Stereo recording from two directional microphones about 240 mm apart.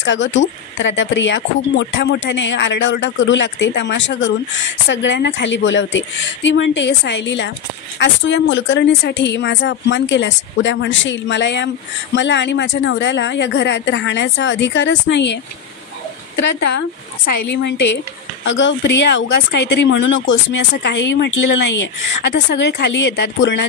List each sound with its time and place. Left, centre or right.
0.0 s speech: left
17.5 s speech: left